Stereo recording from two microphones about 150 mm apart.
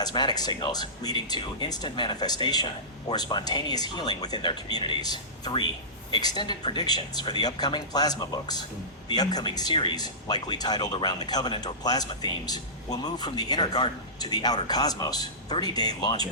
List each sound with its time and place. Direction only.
0.0 s speech: 30° left (ahead or behind)